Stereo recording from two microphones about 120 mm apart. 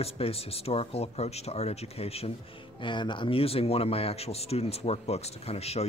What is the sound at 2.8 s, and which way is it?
Speech, 40° left (ahead or behind).